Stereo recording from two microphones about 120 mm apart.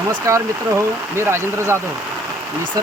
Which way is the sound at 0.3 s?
25° right (ahead or behind).